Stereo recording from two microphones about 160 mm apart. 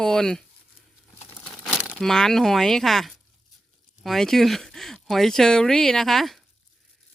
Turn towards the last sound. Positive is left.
turn(degrees=0)  # may be behind; listen again after turning